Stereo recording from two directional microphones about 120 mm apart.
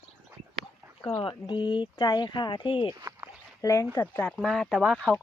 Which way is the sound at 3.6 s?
25° left (ahead or behind).